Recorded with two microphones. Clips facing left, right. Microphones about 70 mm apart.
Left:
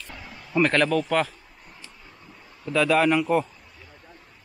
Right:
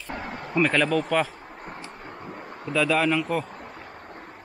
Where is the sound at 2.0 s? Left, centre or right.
Right.